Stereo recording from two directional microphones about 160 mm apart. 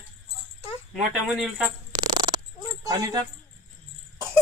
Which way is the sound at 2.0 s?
25° right (ahead or behind).